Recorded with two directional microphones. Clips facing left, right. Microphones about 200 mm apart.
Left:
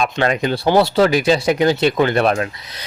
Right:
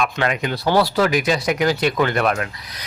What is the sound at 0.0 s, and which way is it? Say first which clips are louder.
Speech: left 3 dB; 30° left (ahead or behind).